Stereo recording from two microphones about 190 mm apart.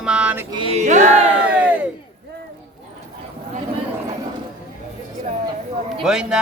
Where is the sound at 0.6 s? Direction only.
35° right (ahead or behind).